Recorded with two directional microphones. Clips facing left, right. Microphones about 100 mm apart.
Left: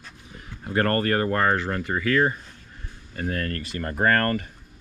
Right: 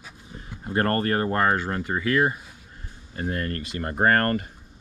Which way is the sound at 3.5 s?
20° right (ahead or behind).